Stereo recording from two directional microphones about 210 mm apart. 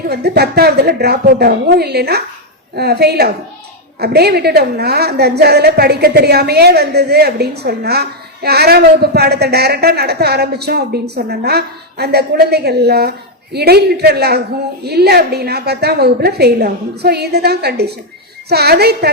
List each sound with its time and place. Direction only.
0.1 s a woman's voice: 50° right (ahead or behind)